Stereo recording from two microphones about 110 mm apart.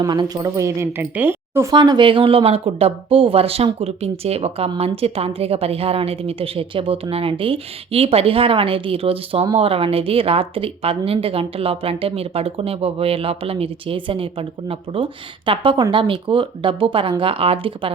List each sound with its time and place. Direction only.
0.0 s speech: 35° right (ahead or behind); by 1.7 s 20° right (ahead or behind)
1.7 s speech: 45° right (ahead or behind)